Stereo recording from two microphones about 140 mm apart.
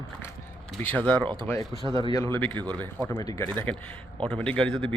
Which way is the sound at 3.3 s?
15° left (ahead or behind).